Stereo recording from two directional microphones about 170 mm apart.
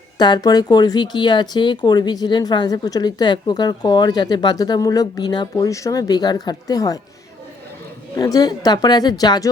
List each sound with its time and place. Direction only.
0.2 s speech: 25° left (ahead or behind)
8.1 s speech: 20° left (ahead or behind)